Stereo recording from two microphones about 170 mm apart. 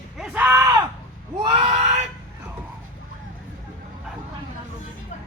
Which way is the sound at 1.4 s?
30° right (ahead or behind).